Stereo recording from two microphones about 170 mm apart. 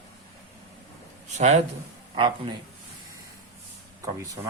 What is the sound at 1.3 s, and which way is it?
Speech, 40° right (ahead or behind).